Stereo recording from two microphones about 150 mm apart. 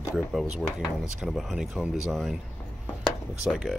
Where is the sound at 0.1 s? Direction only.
5° right (ahead or behind).